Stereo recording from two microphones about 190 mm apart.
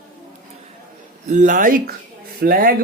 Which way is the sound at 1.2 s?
40° right (ahead or behind).